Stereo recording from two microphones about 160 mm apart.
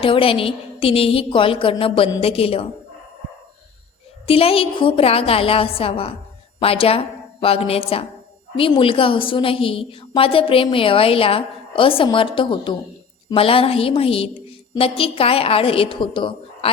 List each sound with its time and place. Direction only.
0.0 s a woman's voice: 35° left (ahead or behind)
4.3 s a woman's voice: 35° left (ahead or behind)